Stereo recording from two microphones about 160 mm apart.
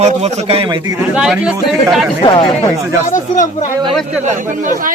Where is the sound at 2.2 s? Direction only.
30° left (ahead or behind).